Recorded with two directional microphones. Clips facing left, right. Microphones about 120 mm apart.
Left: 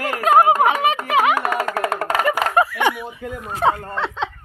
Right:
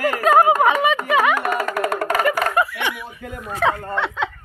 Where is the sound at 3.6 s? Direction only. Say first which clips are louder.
Left 1 dB; 35° left (ahead or behind).